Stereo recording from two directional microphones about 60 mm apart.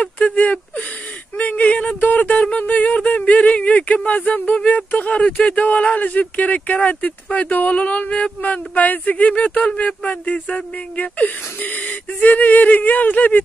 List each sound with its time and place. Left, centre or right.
0.0 s speech: left